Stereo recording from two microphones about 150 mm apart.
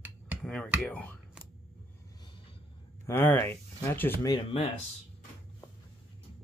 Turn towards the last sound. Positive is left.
turn(degrees=35)  # may be behind; listen again after turning